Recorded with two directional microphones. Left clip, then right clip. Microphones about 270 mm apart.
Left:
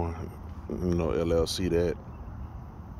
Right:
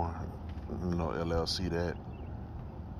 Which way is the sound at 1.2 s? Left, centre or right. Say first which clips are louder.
Left 6 dB; left.